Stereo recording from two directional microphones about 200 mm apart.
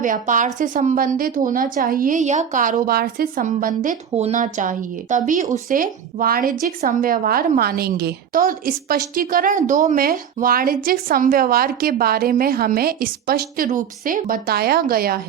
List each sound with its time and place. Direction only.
0.0 s a woman's voice: 40° right (ahead or behind)